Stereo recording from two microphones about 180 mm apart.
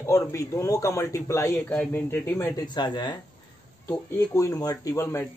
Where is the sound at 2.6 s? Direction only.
25° left (ahead or behind).